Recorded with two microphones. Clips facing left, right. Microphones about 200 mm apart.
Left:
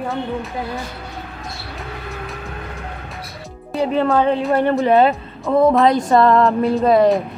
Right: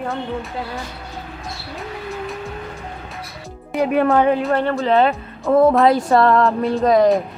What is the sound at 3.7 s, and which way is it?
Speech, 15° right (ahead or behind).